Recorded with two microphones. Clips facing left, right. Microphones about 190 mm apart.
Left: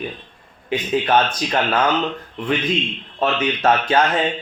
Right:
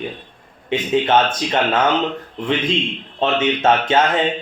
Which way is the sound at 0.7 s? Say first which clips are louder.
Right 2 dB; 25° right (ahead or behind).